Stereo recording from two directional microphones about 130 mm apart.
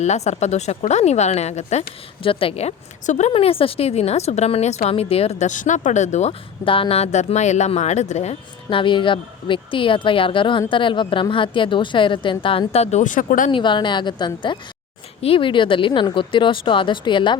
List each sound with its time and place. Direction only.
0.0 s speech: 60° left (ahead or behind)
2.2 s speech: 45° left (ahead or behind)
3.3 s speech: 45° left (ahead or behind); by 6.3 s 60° left (ahead or behind)
6.7 s speech: 45° left (ahead or behind); by 13.5 s 90° left
13.5 s speech: 35° left (ahead or behind)